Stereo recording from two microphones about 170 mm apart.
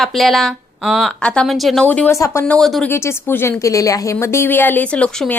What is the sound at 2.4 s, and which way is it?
Speech, 5° left (ahead or behind).